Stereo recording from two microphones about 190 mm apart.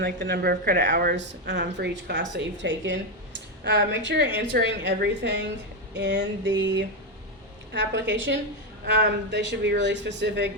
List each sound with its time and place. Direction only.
0.0 s a woman's voice: 60° right (ahead or behind)